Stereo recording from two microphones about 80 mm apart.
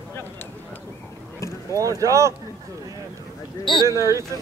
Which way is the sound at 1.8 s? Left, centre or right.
Right.